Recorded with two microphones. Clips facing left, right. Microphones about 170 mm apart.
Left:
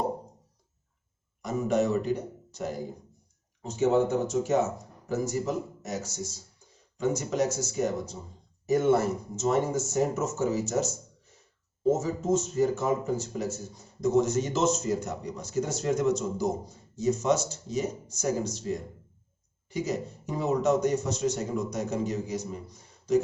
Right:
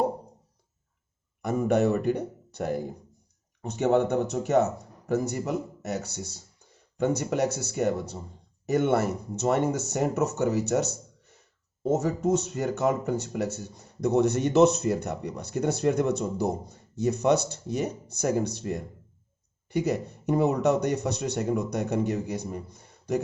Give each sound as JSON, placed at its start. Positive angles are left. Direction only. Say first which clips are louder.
{"t": 1.4, "sound": "speech", "louder": "right 3 dB", "side_deg": -60}